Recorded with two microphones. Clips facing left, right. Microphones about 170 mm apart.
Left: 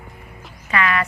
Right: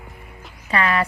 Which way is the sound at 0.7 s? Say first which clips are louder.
Right 1 dB; 35° right (ahead or behind).